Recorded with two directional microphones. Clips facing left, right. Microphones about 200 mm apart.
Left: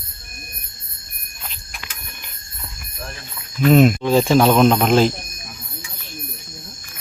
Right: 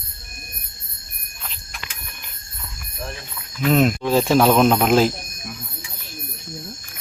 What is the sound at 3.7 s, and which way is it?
Speech, 5° left (ahead or behind).